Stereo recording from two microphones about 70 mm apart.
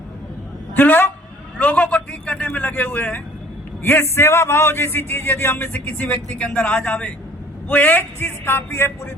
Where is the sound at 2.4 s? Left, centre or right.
Left.